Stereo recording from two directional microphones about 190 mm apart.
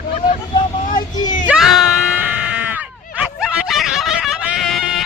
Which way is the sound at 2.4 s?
10° right (ahead or behind).